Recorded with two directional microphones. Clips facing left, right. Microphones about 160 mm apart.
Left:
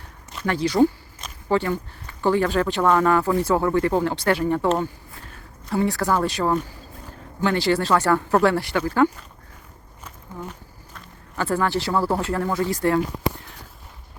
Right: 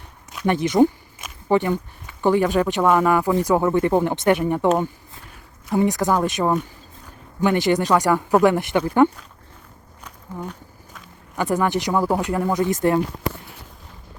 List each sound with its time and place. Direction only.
0.4 s speech: 20° right (ahead or behind)
10.4 s walk: centre (ahead or behind)
11.3 s speech: 15° right (ahead or behind)